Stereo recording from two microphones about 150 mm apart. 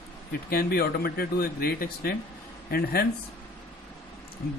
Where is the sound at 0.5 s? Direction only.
90° left.